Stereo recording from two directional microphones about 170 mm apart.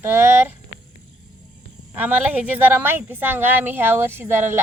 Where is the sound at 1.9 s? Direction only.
10° right (ahead or behind).